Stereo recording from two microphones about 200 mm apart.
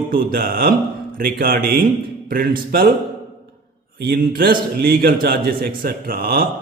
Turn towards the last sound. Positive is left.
turn(degrees=-45)  # may be behind; listen again after turning